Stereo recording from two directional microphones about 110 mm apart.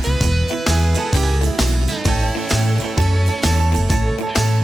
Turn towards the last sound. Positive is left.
turn(degrees=0)  # may be behind; listen again after turning